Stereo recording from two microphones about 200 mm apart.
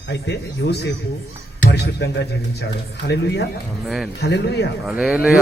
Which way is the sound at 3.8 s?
Centre (ahead or behind).